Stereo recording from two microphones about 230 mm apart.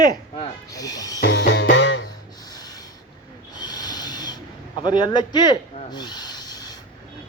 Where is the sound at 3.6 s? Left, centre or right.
Centre.